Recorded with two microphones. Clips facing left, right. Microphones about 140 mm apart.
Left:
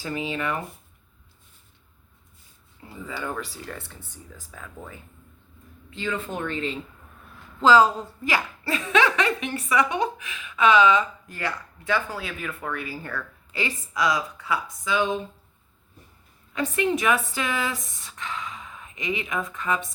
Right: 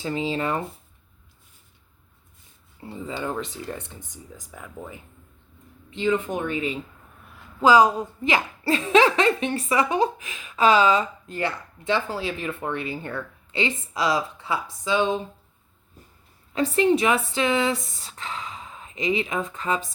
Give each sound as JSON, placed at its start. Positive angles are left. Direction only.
{"t": 0.0, "sound": "a woman's voice", "side_deg": -25}
{"t": 3.0, "sound": "a woman's voice", "side_deg": -25}
{"t": 16.5, "sound": "a woman's voice", "side_deg": -30}